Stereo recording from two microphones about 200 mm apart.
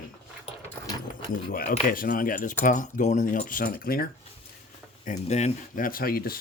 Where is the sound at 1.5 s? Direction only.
45° left (ahead or behind).